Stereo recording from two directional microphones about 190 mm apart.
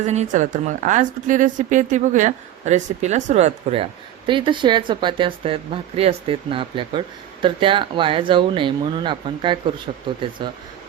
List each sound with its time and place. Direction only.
0.0 s a woman's voice: 35° right (ahead or behind)